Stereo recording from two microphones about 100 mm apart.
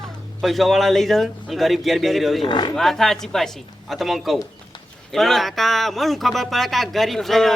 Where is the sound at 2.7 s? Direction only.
5° left (ahead or behind).